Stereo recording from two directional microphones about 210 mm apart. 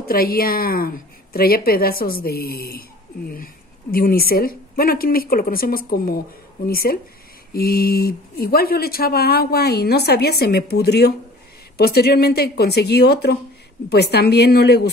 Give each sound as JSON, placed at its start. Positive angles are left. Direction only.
{"t": 0.0, "sound": "speech", "side_deg": 45}
{"t": 3.9, "sound": "speech", "side_deg": 45}